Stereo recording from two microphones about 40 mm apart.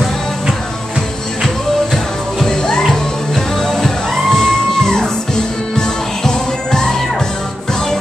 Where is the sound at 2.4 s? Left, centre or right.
Centre.